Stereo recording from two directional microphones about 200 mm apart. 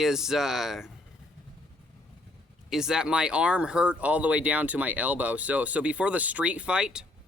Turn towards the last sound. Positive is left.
turn(degrees=-5)  # may be behind; listen again after turning